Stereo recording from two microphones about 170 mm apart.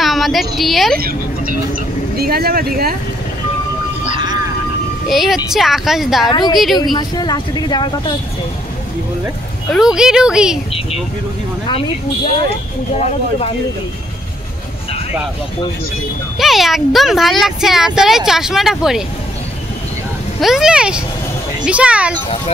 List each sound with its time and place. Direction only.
0.0 s a woman's voice: centre (ahead or behind)
0.9 s speech: 60° right (ahead or behind)
4.1 s vehicle: 25° right (ahead or behind)
5.0 s speech: centre (ahead or behind)
6.8 s speech: 25° left (ahead or behind)
9.7 s speech: 5° right (ahead or behind)
16.3 s speech: centre (ahead or behind)
20.3 s speech: centre (ahead or behind)